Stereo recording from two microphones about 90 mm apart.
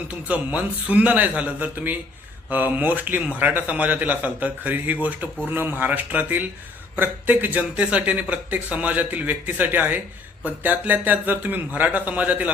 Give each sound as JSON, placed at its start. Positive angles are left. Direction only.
{"t": 0.1, "sound": "speech", "side_deg": -15}